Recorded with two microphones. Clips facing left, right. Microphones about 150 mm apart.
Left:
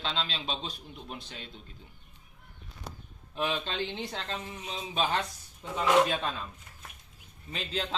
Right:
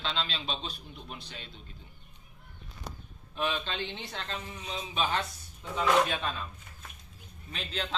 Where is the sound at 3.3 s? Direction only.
30° left (ahead or behind).